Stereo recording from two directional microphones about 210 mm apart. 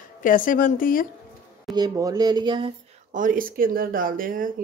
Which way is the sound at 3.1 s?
40° right (ahead or behind).